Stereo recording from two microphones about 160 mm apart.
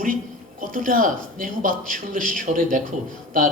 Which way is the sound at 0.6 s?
55° right (ahead or behind).